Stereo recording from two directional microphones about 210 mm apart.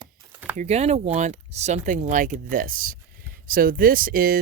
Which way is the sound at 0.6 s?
30° right (ahead or behind).